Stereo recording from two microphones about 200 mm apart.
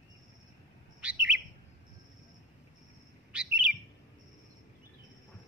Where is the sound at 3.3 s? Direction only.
5° right (ahead or behind).